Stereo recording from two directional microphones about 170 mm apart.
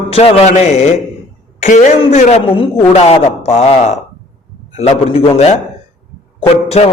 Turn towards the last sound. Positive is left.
turn(degrees=40)  # may be behind; listen again after turning